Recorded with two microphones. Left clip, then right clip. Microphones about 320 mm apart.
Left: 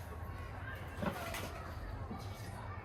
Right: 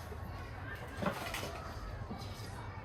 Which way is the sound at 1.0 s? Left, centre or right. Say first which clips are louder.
Right 3 dB; right.